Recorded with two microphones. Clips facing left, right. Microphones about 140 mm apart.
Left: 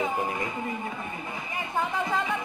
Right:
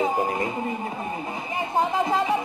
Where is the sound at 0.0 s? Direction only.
35° right (ahead or behind).